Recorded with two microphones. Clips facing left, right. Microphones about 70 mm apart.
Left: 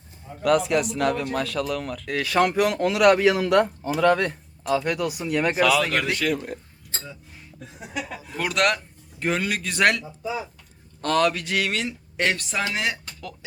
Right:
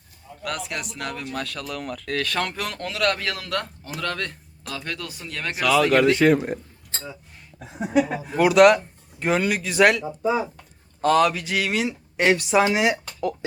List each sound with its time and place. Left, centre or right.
0.4 s speech: centre
5.5 s speech: centre
6.1 s a man's voice: right
7.8 s speech: right
8.4 s speech: centre
11.0 s speech: centre